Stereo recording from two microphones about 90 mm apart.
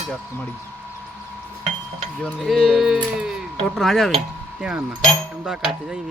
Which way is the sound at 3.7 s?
Centre (ahead or behind).